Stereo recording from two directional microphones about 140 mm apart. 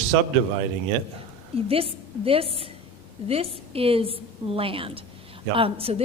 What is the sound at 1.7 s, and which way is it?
A woman's voice, 45° right (ahead or behind).